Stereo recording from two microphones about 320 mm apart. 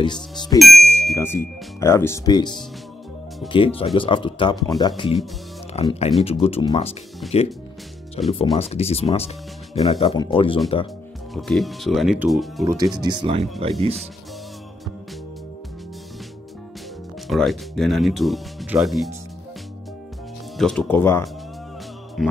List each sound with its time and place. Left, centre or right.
0.0 s speech: centre
0.6 s speech: centre
11.3 s speech: centre
12.9 s speech: centre
17.3 s speech: centre
20.5 s speech: centre
22.2 s music: centre